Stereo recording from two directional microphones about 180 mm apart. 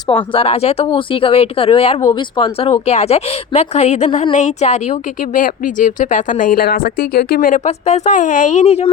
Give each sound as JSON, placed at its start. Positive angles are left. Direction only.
{"t": 0.3, "sound": "speech", "side_deg": 35}